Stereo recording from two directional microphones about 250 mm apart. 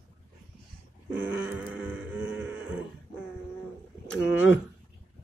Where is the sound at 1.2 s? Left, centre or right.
Centre.